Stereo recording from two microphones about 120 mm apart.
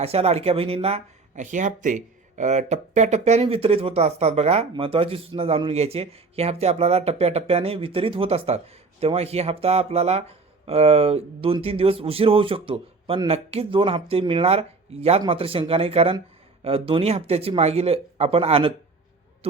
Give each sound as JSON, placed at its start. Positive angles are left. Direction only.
{"t": 0.0, "sound": "speech", "side_deg": -55}
{"t": 4.7, "sound": "speech", "side_deg": -50}